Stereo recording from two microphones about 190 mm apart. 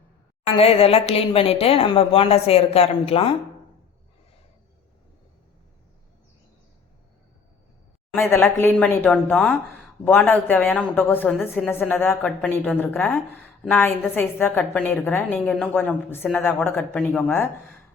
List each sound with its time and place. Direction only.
0.4 s speech: 30° left (ahead or behind)
8.1 s a woman's voice: 10° left (ahead or behind)